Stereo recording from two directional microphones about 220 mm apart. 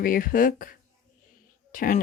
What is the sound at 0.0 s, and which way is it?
Speech, 40° left (ahead or behind).